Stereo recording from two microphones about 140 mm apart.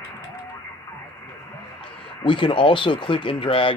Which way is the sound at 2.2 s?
35° left (ahead or behind).